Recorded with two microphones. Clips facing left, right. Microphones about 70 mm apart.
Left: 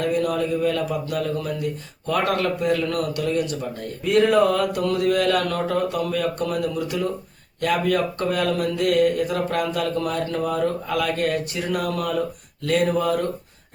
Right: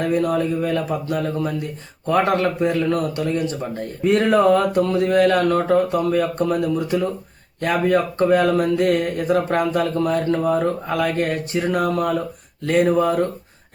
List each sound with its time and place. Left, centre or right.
0.0 s a man's voice: right